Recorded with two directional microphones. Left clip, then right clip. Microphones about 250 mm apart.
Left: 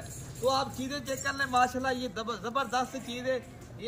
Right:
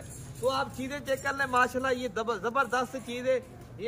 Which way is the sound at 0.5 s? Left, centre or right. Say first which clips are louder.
Left 1 dB; centre.